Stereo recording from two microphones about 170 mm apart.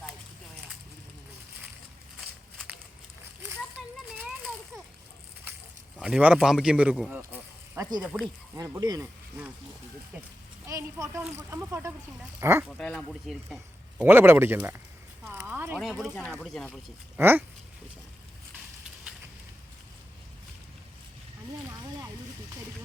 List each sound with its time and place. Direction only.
3.8 s a sound: centre (ahead or behind)
4.2 s children playing: 5° right (ahead or behind)
6.0 s a man's voice: 5° right (ahead or behind)
7.1 s a sound: 10° right (ahead or behind)
8.0 s a man's voice: centre (ahead or behind)
8.5 s speech: 20° right (ahead or behind)
10.7 s speech: 20° right (ahead or behind)
12.6 s a man's voice: 5° left (ahead or behind)
14.0 s speech: 10° right (ahead or behind)
15.4 s a sound: 15° right (ahead or behind)
15.8 s a man's voice: centre (ahead or behind)
17.2 s speech: 10° right (ahead or behind)
21.7 s a sound: 20° right (ahead or behind)